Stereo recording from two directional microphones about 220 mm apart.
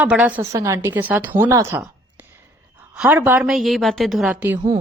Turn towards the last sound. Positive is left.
turn(degrees=-5)  # may be behind; listen again after turning